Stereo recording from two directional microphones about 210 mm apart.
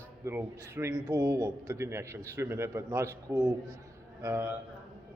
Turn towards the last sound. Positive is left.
turn(degrees=-15)  # may be behind; listen again after turning